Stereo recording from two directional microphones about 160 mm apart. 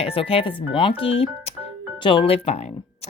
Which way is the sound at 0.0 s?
35° left (ahead or behind).